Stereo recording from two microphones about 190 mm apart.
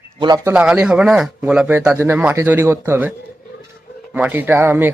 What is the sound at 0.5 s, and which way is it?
Speech, 5° right (ahead or behind).